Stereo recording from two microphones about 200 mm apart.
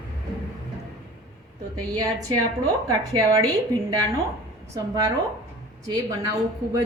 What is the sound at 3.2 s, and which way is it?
Speech, 15° right (ahead or behind).